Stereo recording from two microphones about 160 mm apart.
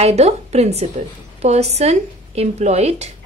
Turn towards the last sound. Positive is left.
turn(degrees=-40)  # may be behind; listen again after turning